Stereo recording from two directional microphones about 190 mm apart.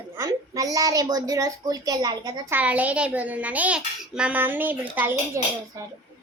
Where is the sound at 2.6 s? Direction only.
10° right (ahead or behind).